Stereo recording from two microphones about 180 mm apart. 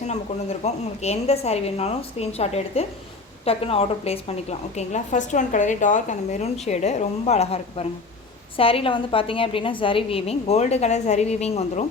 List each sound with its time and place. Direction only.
0.1 s a woman's voice: 35° left (ahead or behind)